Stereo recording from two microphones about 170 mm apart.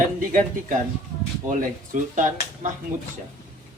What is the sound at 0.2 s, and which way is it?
Speech, 45° right (ahead or behind).